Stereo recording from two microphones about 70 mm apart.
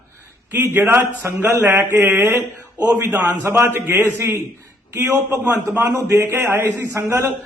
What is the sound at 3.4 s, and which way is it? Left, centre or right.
A man's voice, right.